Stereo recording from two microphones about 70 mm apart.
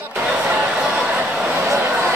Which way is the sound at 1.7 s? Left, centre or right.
Right.